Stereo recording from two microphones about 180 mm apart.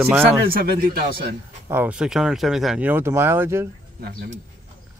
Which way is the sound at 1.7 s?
10° right (ahead or behind).